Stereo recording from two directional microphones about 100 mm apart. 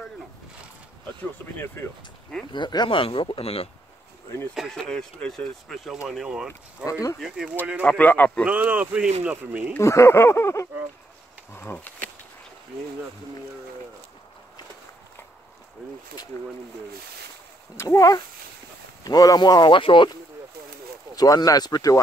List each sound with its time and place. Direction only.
2.5 s speech: 50° left (ahead or behind); by 3.6 s 75° left (ahead or behind)
4.6 s speech: centre (ahead or behind)
6.8 s speech: 35° left (ahead or behind)
7.2 s speech: 5° right (ahead or behind)
8.0 s a man's voice: 15° left (ahead or behind)
8.5 s speech: 15° right (ahead or behind)
9.8 s speech: 30° left (ahead or behind)
17.8 s speech: 35° left (ahead or behind); by 20.1 s 60° left (ahead or behind)
21.1 s speech: 35° left (ahead or behind)